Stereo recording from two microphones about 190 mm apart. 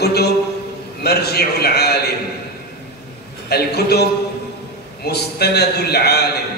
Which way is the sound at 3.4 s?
55° left (ahead or behind).